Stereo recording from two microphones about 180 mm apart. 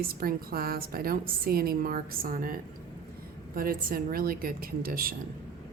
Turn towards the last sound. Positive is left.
turn(degrees=-55)  # may be behind; listen again after turning